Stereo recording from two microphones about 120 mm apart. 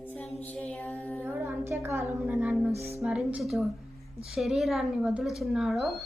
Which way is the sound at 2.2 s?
10° right (ahead or behind).